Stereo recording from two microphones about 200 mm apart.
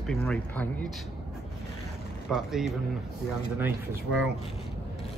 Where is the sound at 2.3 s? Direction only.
Centre (ahead or behind).